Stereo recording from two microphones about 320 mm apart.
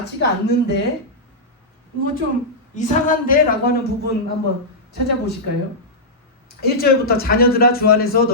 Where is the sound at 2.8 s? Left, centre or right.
Left.